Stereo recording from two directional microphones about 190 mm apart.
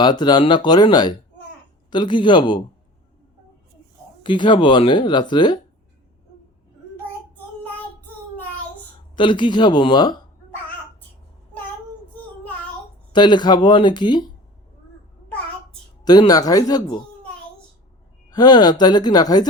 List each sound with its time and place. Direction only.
0.0 s speech: 20° left (ahead or behind)
4.2 s speech: 25° left (ahead or behind)
9.1 s speech: 25° left (ahead or behind)
13.1 s speech: 25° left (ahead or behind)
16.0 s speech: 20° left (ahead or behind)
18.3 s speech: 20° left (ahead or behind)